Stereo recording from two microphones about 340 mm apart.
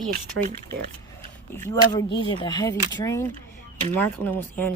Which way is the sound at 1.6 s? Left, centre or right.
Centre.